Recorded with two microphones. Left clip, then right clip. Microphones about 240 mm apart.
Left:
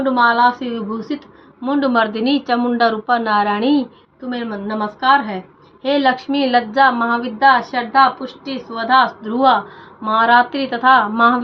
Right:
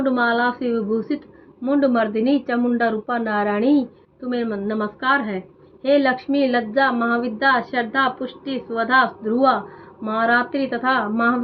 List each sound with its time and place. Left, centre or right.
0.0 s a woman's voice: centre
10.0 s a woman's voice: centre